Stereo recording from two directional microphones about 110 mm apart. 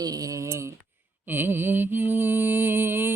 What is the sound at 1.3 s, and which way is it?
Mantra, 20° right (ahead or behind).